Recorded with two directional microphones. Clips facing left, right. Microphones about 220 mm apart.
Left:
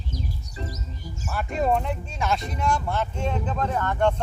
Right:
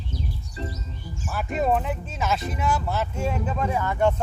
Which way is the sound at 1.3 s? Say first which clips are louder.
Even; centre (ahead or behind).